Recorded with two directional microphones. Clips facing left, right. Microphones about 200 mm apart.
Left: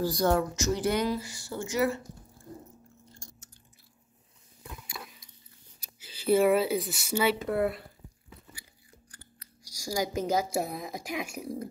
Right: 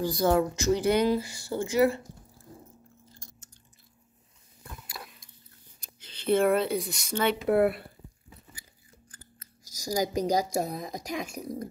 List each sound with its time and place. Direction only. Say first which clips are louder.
0.0 s speech: right 1 dB; centre (ahead or behind)
0.4 s speech: right 3 dB; 15° right (ahead or behind)
0.9 s speech: right 4 dB; 30° right (ahead or behind)
4.6 s a sound: left 1 dB; centre (ahead or behind)
5.8 s speech: left 1 dB; 10° left (ahead or behind)
7.4 s speech: right 5 dB; 60° right (ahead or behind)
10.1 s speech: right 1 dB; 15° right (ahead or behind)
10.6 s a woman's voice: right 2 dB; 5° left (ahead or behind)